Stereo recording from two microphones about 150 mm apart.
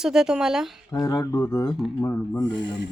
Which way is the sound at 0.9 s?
25° left (ahead or behind).